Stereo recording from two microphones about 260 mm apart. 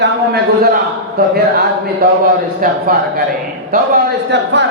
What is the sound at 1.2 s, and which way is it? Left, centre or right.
Speech, right.